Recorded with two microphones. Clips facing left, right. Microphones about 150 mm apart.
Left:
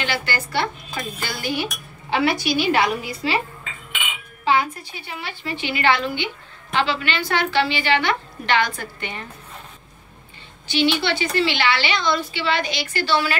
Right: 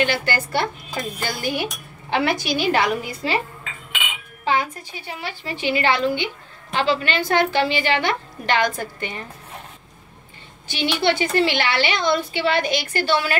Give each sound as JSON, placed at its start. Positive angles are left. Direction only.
{"t": 0.0, "sound": "a woman's voice", "side_deg": -50}
{"t": 4.6, "sound": "a woman's voice", "side_deg": -40}
{"t": 10.7, "sound": "a woman's voice", "side_deg": -50}